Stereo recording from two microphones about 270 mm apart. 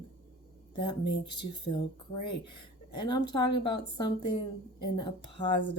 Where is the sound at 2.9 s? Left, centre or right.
Centre.